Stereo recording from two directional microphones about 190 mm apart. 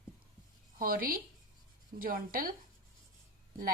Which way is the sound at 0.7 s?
50° right (ahead or behind).